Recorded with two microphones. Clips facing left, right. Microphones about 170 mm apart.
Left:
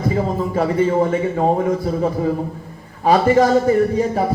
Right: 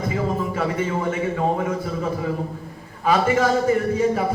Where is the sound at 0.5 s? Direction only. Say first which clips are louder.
Left 7 dB; 35° left (ahead or behind).